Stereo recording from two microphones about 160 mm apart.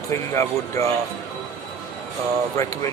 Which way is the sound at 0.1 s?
20° left (ahead or behind).